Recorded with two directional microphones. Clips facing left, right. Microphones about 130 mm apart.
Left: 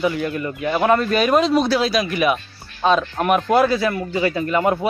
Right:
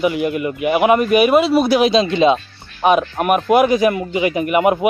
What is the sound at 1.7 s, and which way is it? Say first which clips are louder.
Speech: right 5 dB; 20° right (ahead or behind).